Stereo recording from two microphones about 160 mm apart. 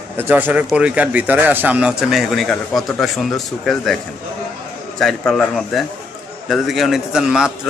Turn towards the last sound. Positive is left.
turn(degrees=-5)  # may be behind; listen again after turning